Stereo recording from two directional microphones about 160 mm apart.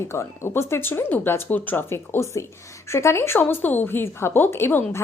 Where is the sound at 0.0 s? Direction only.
15° left (ahead or behind).